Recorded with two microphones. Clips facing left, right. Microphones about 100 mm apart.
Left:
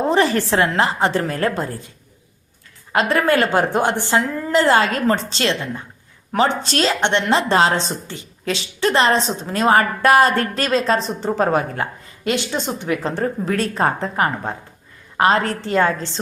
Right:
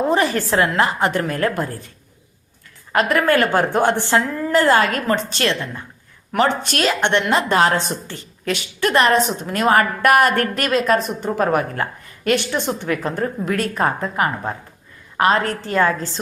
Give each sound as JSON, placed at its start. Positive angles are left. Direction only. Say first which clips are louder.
{"t": 0.1, "sound": "a woman's voice", "louder": "left 1 dB", "side_deg": 30}
{"t": 2.9, "sound": "a woman's voice", "louder": "even", "side_deg": 25}
{"t": 15.7, "sound": "a woman's voice", "louder": "even", "side_deg": 30}